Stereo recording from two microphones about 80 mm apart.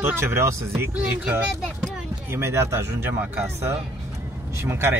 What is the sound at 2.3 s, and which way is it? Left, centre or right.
A man's voice, right.